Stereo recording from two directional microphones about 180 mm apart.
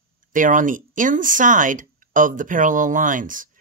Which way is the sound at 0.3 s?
45° right (ahead or behind).